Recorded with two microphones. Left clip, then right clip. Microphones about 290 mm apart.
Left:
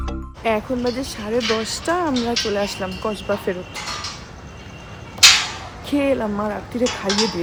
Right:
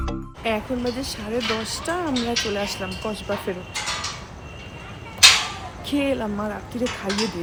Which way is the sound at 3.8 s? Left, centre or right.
Right.